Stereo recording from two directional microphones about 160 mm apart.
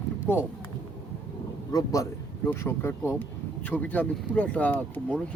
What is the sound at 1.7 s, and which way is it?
A man's voice, 20° left (ahead or behind).